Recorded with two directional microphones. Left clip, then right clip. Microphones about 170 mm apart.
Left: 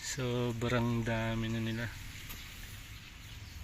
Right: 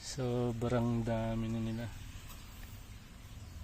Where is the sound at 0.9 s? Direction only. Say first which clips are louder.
Left 1 dB; 10° right (ahead or behind).